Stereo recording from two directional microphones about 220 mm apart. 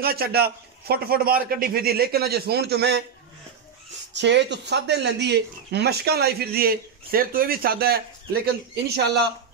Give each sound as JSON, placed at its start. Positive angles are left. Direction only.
{"t": 0.0, "sound": "speech", "side_deg": -45}
{"t": 4.1, "sound": "speech", "side_deg": -50}